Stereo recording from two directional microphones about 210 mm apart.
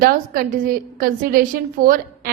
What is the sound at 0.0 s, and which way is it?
A woman's voice, 45° right (ahead or behind).